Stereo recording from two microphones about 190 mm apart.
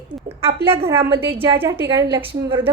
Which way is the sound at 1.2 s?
10° right (ahead or behind).